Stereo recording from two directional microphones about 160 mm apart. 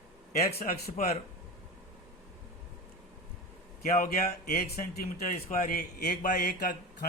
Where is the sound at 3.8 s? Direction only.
65° left (ahead or behind).